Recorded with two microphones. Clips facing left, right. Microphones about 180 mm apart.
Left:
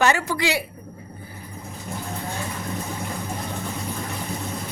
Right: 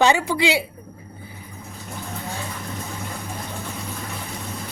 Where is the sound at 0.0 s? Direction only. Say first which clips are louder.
Right 3 dB; 15° right (ahead or behind).